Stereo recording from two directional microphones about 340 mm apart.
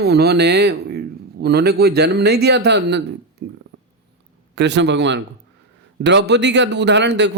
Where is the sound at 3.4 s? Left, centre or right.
Right.